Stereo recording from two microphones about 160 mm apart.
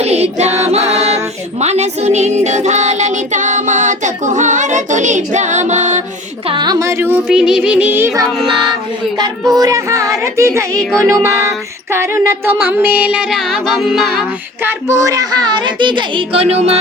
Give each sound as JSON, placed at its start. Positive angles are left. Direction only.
{"t": 0.0, "sound": "a sound", "side_deg": -40}
{"t": 6.5, "sound": "music", "side_deg": -25}
{"t": 9.1, "sound": "a woman's voice", "side_deg": -25}
{"t": 11.0, "sound": "music", "side_deg": -15}
{"t": 14.6, "sound": "a woman's voice", "side_deg": -15}